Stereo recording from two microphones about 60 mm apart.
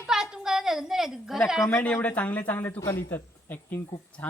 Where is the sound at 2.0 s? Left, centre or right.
Left.